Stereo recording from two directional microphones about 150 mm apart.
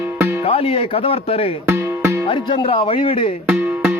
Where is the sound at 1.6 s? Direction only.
20° right (ahead or behind).